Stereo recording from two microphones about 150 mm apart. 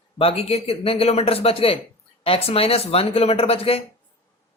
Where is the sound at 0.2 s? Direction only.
40° left (ahead or behind).